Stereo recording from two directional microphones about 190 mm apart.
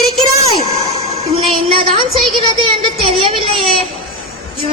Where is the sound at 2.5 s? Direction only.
30° right (ahead or behind).